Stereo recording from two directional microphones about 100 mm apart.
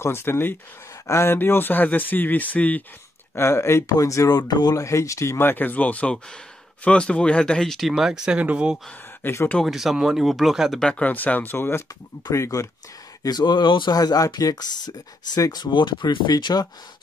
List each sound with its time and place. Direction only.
0.0 s speech: 25° left (ahead or behind)
3.3 s speech: 25° left (ahead or behind); by 8.7 s 10° right (ahead or behind)
9.2 s speech: 30° left (ahead or behind)
9.7 s speech: centre (ahead or behind); by 12.6 s 30° left (ahead or behind)
13.2 s speech: 45° left (ahead or behind)
13.9 s speech: 40° left (ahead or behind)